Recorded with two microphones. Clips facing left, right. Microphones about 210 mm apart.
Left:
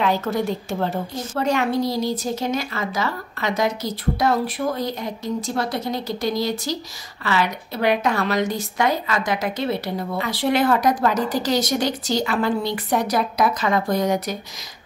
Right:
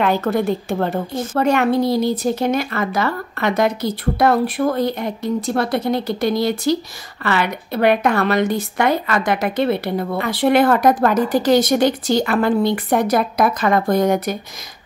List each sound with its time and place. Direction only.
0.0 s a woman's voice: 55° right (ahead or behind)